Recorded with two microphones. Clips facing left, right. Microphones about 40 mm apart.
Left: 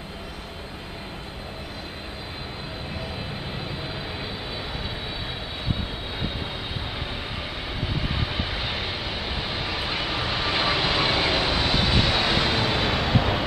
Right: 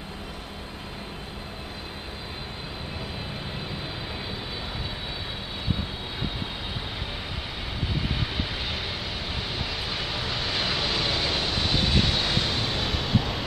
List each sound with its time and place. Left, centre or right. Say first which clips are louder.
8.2 s vehicle: left 2 dB; centre; by 13.4 s left